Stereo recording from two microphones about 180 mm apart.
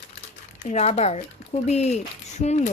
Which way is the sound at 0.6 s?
40° left (ahead or behind).